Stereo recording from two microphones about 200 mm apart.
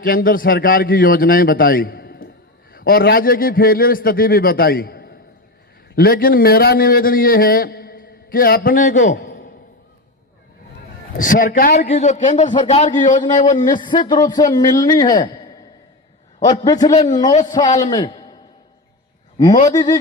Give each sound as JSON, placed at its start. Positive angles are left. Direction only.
{"t": 0.0, "sound": "a man's voice", "side_deg": 45}
{"t": 11.2, "sound": "a man's voice", "side_deg": 40}
{"t": 13.6, "sound": "speech", "side_deg": 25}
{"t": 17.9, "sound": "a sound", "side_deg": 20}
{"t": 19.6, "sound": "speech", "side_deg": 20}